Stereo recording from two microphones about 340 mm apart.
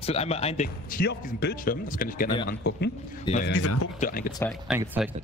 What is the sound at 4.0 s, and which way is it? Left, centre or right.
Speech, left.